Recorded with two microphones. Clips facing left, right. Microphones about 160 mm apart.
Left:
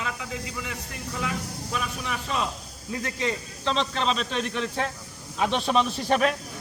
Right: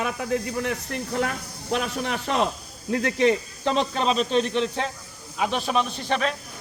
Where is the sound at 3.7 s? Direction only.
45° right (ahead or behind).